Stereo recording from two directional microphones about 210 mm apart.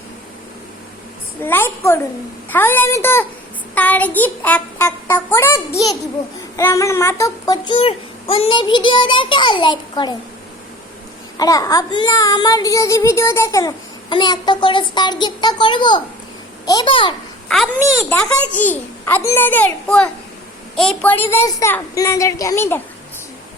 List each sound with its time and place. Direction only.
1.4 s a child's voice: 10° left (ahead or behind)
11.3 s a child's voice: 15° left (ahead or behind)
18.1 s a child's voice: 10° left (ahead or behind)